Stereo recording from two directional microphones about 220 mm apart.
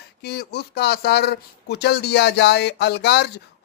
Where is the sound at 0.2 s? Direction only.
45° left (ahead or behind).